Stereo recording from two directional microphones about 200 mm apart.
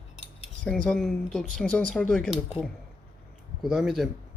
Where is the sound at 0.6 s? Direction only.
5° left (ahead or behind).